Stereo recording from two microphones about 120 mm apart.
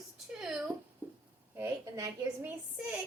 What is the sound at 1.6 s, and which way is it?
Speech, 30° right (ahead or behind).